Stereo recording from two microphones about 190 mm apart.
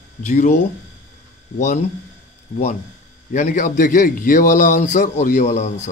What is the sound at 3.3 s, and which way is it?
A man's voice, 45° left (ahead or behind).